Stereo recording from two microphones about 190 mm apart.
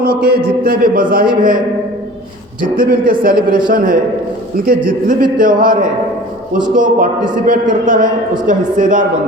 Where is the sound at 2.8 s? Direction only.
50° right (ahead or behind).